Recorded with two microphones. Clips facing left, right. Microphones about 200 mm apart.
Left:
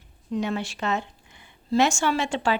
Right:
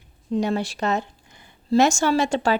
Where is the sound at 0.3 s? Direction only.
40° right (ahead or behind).